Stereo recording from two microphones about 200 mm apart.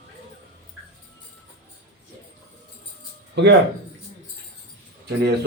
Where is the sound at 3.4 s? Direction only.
60° right (ahead or behind).